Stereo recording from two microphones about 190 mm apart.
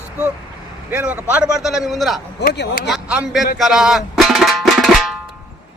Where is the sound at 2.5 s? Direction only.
65° left (ahead or behind).